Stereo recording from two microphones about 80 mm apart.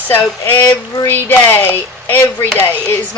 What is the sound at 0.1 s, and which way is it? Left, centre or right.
Speech, left.